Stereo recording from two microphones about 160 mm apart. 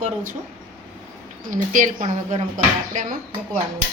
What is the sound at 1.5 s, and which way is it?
Speech, 55° right (ahead or behind).